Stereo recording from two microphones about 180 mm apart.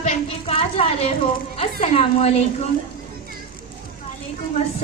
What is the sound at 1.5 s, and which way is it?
Speech, 35° left (ahead or behind).